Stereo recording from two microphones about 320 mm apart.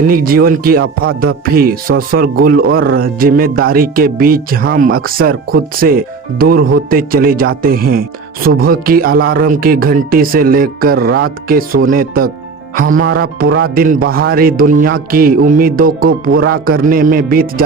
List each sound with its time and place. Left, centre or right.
0.0 s speech: right